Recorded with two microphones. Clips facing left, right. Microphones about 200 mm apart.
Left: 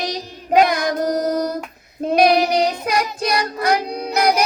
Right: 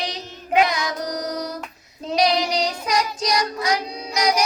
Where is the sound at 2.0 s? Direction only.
55° left (ahead or behind).